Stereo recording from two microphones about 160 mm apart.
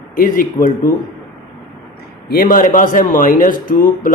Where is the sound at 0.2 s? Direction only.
60° left (ahead or behind).